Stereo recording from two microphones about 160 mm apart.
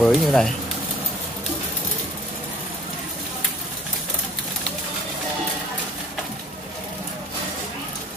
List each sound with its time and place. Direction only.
0.0 s speech: centre (ahead or behind)